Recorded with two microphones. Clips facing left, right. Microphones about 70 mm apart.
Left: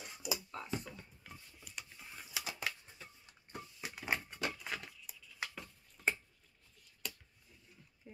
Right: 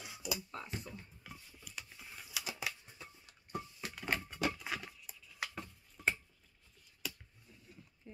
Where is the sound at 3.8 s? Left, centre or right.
Centre.